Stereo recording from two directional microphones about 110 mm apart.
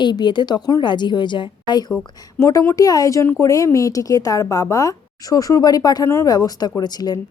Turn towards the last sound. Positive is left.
turn(degrees=35)  # may be behind; listen again after turning